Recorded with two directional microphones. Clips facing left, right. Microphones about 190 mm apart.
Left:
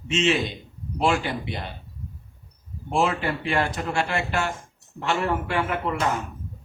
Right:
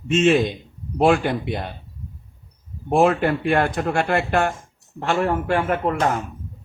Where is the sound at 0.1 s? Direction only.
50° right (ahead or behind).